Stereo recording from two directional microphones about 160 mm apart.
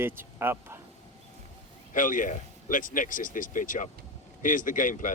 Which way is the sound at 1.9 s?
55° left (ahead or behind).